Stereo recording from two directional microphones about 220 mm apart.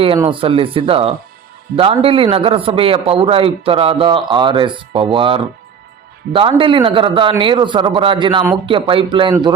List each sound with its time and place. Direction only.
0.0 s a man's voice: 25° right (ahead or behind)